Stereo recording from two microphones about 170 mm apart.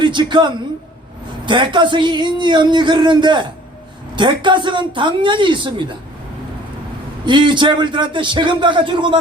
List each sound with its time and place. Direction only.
0.0 s a man's voice: 30° right (ahead or behind)
7.3 s speech: 25° right (ahead or behind)